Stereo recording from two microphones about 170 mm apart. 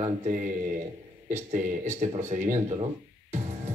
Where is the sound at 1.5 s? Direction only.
45° right (ahead or behind).